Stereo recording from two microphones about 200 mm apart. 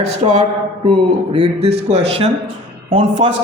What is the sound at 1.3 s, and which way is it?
A man's voice, 30° right (ahead or behind).